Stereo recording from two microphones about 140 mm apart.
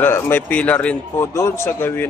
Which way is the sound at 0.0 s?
15° left (ahead or behind).